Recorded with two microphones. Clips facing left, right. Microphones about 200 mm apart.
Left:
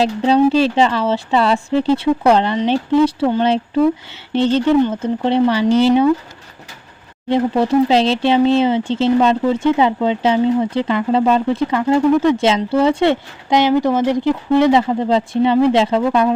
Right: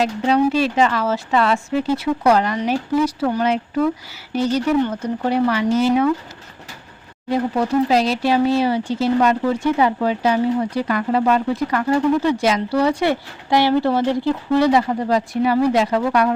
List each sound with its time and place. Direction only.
0.0 s speech: 30° left (ahead or behind)
7.3 s speech: 25° left (ahead or behind)